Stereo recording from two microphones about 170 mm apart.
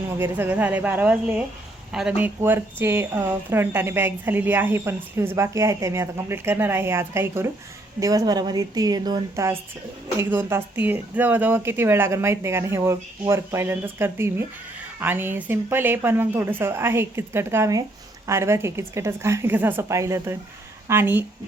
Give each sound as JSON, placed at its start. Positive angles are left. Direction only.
{"t": 0.2, "sound": "a woman's voice", "side_deg": -10}